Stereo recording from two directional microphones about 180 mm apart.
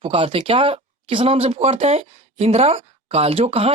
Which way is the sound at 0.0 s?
30° right (ahead or behind).